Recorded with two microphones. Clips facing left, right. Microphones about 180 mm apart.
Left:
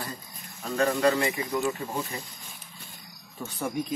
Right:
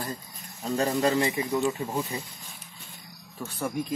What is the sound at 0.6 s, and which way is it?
Speech, 25° right (ahead or behind).